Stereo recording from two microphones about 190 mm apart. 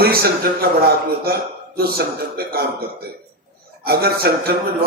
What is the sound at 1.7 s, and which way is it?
Speech, 55° right (ahead or behind).